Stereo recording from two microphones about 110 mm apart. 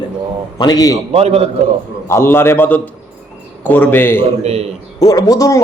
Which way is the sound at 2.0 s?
25° left (ahead or behind).